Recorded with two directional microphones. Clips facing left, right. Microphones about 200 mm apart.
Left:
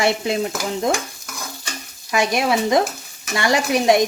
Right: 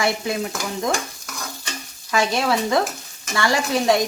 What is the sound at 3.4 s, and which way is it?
Stir, 20° left (ahead or behind).